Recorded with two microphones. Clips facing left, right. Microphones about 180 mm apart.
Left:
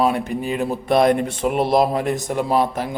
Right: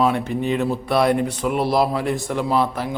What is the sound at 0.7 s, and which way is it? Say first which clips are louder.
A man's voice: left 5 dB; 20° left (ahead or behind).